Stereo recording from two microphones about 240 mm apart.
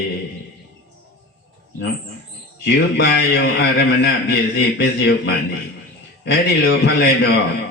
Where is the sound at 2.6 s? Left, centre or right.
Left.